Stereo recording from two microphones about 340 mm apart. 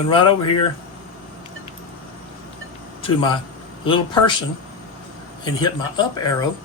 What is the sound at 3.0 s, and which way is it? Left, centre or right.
Speech, centre.